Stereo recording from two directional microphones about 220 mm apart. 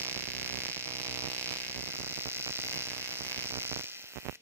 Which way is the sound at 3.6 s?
10° right (ahead or behind).